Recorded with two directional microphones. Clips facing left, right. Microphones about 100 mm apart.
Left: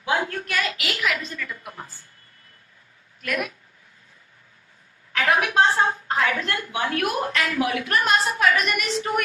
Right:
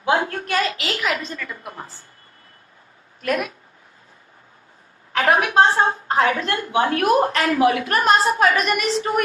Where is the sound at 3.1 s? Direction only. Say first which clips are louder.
Right 5 dB; 35° right (ahead or behind).